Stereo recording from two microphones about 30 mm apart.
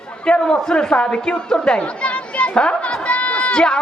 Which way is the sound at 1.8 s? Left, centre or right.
Left.